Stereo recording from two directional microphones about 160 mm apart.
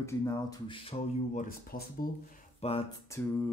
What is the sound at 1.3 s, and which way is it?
Speech, 60° left (ahead or behind).